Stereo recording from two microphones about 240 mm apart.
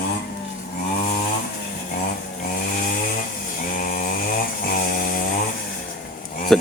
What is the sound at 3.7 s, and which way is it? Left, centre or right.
Chainsaw, left.